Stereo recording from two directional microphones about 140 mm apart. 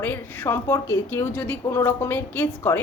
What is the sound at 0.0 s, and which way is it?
A woman's voice, 15° left (ahead or behind).